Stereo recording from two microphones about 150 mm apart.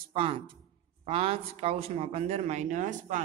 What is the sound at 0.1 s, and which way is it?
Speech, 35° right (ahead or behind).